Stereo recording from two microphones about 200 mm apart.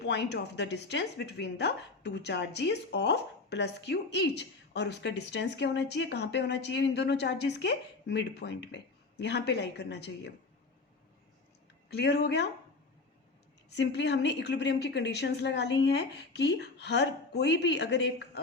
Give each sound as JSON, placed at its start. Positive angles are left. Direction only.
{"t": 0.0, "sound": "speech", "side_deg": 60}
{"t": 11.9, "sound": "speech", "side_deg": 55}
{"t": 13.7, "sound": "speech", "side_deg": 60}